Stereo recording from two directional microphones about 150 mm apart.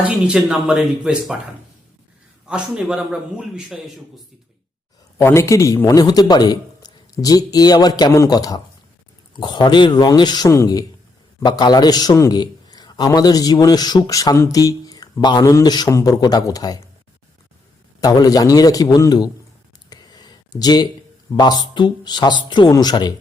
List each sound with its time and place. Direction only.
0.3 s a man's voice: centre (ahead or behind)
2.5 s a man's voice: 5° right (ahead or behind)
5.1 s a man's voice: 20° left (ahead or behind)
18.0 s a man's voice: 25° left (ahead or behind)
19.9 s a sound: 25° left (ahead or behind)
21.3 s a man's voice: 30° left (ahead or behind)